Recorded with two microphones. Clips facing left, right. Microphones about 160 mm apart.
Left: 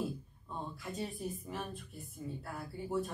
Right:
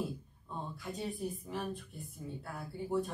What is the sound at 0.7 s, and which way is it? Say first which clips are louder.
Speech: right 3 dB; centre (ahead or behind).